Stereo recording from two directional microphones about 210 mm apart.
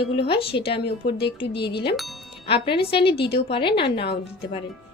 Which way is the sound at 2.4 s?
25° left (ahead or behind).